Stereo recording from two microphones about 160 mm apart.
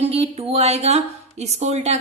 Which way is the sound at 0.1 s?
40° right (ahead or behind).